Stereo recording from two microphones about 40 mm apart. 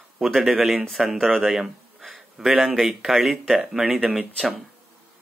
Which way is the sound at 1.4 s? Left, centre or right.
Centre.